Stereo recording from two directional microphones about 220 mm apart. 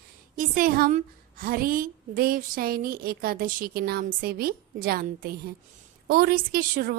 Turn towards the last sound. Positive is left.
turn(degrees=-40)  # may be behind; listen again after turning